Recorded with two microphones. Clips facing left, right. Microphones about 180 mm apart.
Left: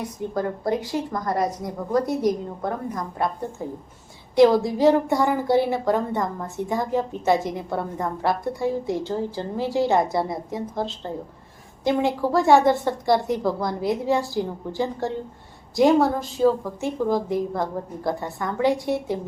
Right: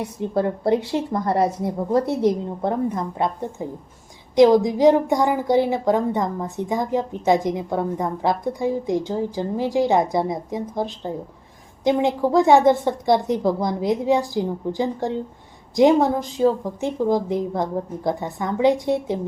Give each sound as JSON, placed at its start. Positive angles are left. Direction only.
{"t": 0.2, "sound": "a woman's voice", "side_deg": -25}